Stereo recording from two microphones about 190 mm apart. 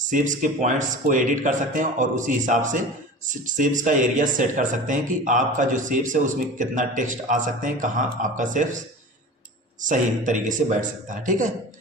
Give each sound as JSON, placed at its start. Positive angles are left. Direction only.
{"t": 0.1, "sound": "speech", "side_deg": -40}
{"t": 9.8, "sound": "speech", "side_deg": -40}